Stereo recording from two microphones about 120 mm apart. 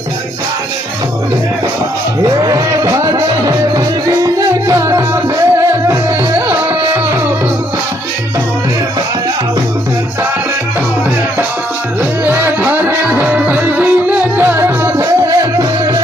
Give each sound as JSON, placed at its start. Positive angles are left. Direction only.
{"t": 2.2, "sound": "music", "side_deg": -30}
{"t": 12.2, "sound": "music", "side_deg": -20}